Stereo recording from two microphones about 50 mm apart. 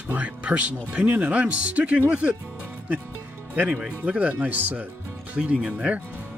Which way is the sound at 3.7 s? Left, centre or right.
Right.